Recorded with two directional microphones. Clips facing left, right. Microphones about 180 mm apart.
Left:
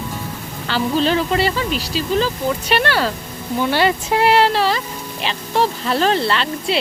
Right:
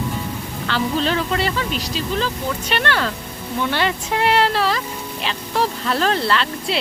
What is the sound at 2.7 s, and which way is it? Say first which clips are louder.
Speech: left 2 dB; 35° left (ahead or behind).